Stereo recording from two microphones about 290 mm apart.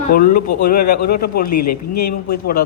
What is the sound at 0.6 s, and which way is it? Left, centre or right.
Speech, left.